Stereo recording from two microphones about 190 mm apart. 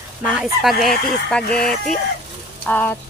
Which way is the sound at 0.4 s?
Centre (ahead or behind).